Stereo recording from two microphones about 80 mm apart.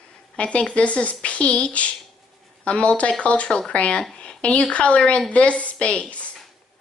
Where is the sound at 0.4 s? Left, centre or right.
Centre.